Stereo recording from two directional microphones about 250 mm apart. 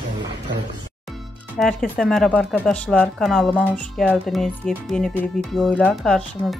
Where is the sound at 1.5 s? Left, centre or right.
Centre.